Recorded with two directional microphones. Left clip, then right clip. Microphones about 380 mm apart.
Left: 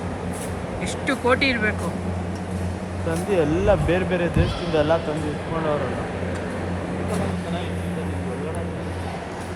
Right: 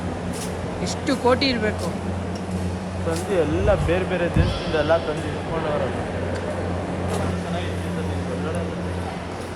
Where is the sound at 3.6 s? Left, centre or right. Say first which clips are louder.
Left 1 dB; left.